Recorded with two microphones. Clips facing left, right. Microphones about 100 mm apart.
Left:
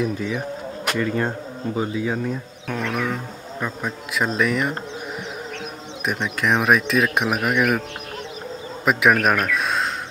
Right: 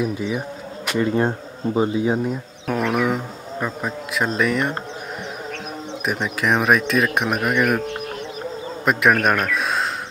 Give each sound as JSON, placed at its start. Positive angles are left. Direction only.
{"t": 0.0, "sound": "speech", "side_deg": -10}
{"t": 0.9, "sound": "speech", "side_deg": -25}
{"t": 6.0, "sound": "speech", "side_deg": 0}
{"t": 8.8, "sound": "speech", "side_deg": 0}